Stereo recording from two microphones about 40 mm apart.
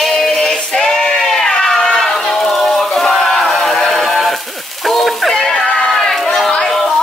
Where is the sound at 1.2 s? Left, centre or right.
Centre.